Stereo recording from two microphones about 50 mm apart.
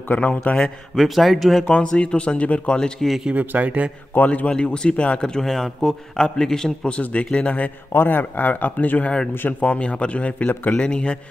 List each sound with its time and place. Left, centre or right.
0.1 s speech: left
0.9 s speech: centre
1.7 s speech: left
3.3 s speech: right
4.1 s a man's voice: left
4.5 s speech: centre
5.2 s a man's voice: centre
6.9 s speech: left
7.9 s speech: left
10.5 s speech: left
10.8 s speech: left